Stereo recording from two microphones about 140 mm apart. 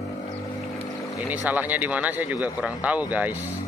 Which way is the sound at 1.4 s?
10° right (ahead or behind).